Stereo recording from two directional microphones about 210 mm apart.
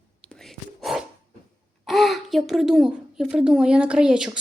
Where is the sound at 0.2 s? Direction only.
5° left (ahead or behind).